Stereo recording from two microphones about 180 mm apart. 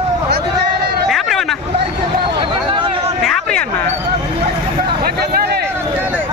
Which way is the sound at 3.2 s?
5° left (ahead or behind).